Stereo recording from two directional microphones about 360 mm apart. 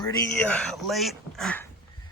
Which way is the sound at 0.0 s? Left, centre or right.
Centre.